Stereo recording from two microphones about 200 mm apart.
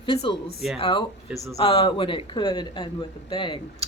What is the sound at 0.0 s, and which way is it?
Speech, 25° left (ahead or behind).